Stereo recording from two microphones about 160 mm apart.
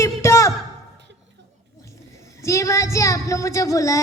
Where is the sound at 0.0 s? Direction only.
20° left (ahead or behind).